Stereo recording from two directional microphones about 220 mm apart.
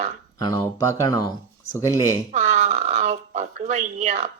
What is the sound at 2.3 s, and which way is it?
Speech, 30° right (ahead or behind).